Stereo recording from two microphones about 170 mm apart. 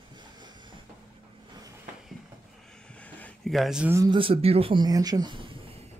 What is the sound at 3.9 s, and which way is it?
Speech, 25° right (ahead or behind).